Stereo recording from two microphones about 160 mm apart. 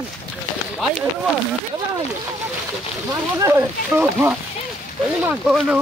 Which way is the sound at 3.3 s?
15° right (ahead or behind).